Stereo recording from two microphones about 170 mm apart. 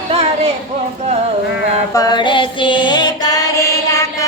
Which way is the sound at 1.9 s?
25° left (ahead or behind).